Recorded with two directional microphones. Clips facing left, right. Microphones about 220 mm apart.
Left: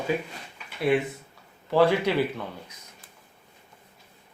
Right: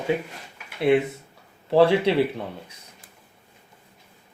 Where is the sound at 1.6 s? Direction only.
30° right (ahead or behind).